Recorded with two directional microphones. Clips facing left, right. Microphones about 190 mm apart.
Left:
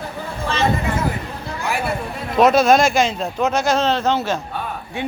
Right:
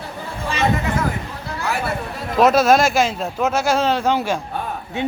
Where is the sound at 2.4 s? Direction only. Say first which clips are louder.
Left 1 dB; centre (ahead or behind).